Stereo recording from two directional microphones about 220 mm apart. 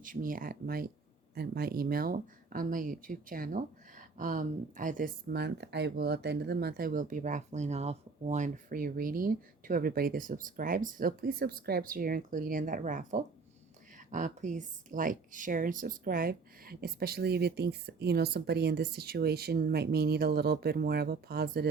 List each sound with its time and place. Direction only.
0.0 s a woman's voice: 40° right (ahead or behind)